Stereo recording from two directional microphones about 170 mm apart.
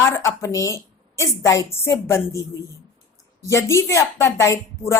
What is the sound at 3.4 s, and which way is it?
A woman's voice, 15° left (ahead or behind).